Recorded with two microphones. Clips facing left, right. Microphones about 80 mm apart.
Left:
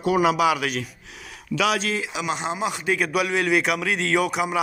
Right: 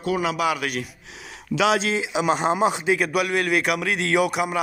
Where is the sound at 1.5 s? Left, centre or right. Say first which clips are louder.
Right 2 dB; right.